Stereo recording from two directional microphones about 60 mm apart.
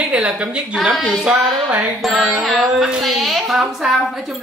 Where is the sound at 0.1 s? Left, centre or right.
Right.